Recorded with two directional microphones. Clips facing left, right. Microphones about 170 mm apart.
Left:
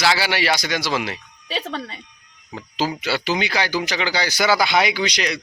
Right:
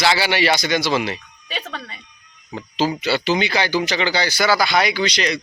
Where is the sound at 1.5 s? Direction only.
30° left (ahead or behind).